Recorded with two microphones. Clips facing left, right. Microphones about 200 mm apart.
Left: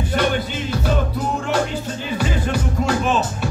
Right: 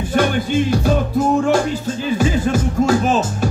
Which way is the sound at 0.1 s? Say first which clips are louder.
Right 5 dB; 45° right (ahead or behind).